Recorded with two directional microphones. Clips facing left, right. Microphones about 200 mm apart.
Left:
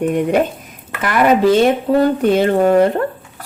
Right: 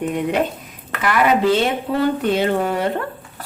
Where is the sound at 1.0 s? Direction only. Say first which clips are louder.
Left 4 dB; 45° left (ahead or behind).